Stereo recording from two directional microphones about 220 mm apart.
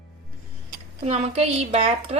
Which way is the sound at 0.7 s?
30° right (ahead or behind).